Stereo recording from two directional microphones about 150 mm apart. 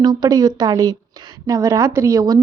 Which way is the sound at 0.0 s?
25° right (ahead or behind).